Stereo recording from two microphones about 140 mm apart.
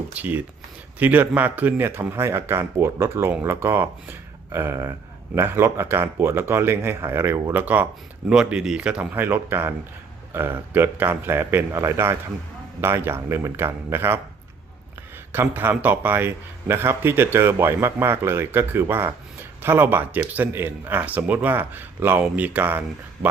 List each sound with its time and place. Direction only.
0.1 s speech: 10° right (ahead or behind)
15.3 s speech: 15° right (ahead or behind)